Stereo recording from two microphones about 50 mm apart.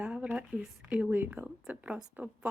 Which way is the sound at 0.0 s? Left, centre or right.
Right.